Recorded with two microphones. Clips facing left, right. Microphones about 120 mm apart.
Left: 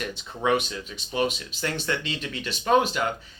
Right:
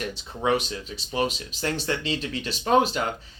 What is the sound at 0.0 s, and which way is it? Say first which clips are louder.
Speech: even; 35° right (ahead or behind).